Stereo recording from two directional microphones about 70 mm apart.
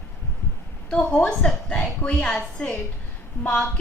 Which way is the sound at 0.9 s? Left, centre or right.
Centre.